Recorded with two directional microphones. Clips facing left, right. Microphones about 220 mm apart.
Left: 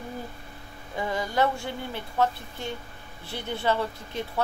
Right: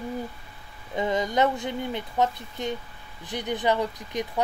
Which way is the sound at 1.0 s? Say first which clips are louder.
Right 3 dB; 20° right (ahead or behind).